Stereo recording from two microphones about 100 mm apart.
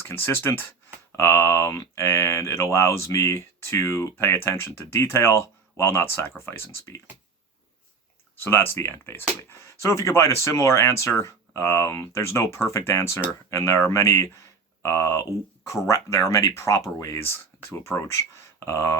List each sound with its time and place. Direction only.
0.0 s speech: 25° left (ahead or behind)
8.4 s speech: 20° left (ahead or behind)